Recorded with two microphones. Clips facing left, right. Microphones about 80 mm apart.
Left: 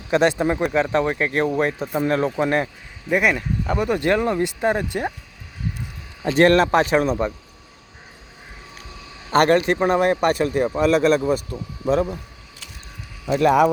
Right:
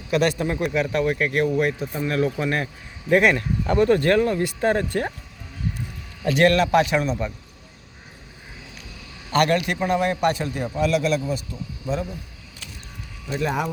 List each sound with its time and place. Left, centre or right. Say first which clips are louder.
0.1 s speech: left 3 dB; left
3.1 s speech: right 2 dB; centre
6.2 s speech: left 3 dB; left
9.3 s a man's voice: left 4 dB; left
13.2 s speech: left 9 dB; left